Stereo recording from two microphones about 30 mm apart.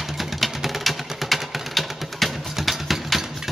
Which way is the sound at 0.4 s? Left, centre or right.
Centre.